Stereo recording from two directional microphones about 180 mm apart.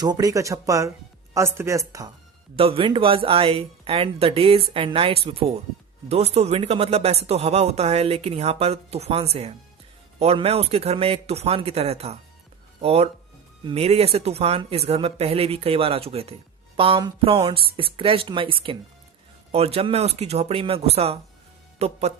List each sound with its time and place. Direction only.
0.0 s speech: 20° right (ahead or behind)
2.6 s speech: 30° right (ahead or behind)